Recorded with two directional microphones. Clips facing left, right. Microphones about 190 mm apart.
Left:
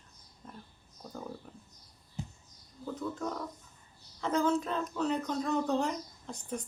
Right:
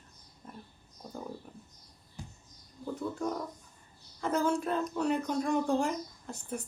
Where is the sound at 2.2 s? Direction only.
20° left (ahead or behind).